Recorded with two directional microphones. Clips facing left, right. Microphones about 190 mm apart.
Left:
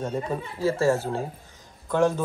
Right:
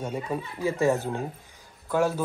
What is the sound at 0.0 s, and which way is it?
Speech, 10° right (ahead or behind).